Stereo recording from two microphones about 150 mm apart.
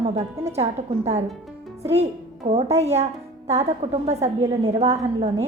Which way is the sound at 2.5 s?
45° right (ahead or behind).